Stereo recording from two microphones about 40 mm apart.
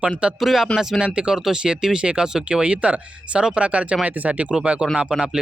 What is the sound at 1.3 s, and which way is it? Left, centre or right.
Speech, centre.